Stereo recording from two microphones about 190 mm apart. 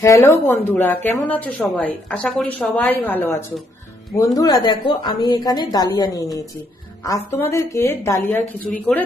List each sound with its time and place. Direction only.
0.0 s a woman's voice: 15° left (ahead or behind)